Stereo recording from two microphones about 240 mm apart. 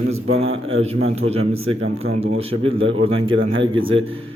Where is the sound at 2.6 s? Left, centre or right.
Right.